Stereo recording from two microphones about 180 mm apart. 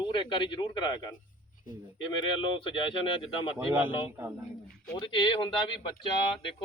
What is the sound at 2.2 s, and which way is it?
A man's voice, 25° left (ahead or behind).